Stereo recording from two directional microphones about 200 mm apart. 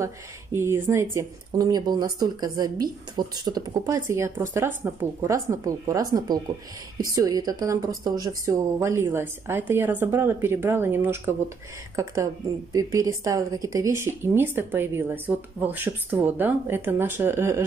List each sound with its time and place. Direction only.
0.0 s speech: 15° right (ahead or behind)